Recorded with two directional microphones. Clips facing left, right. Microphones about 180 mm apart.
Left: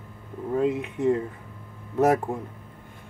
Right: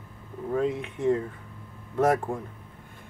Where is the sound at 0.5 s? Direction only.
10° left (ahead or behind).